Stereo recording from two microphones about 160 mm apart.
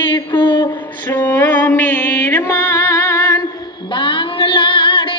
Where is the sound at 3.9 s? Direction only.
30° left (ahead or behind).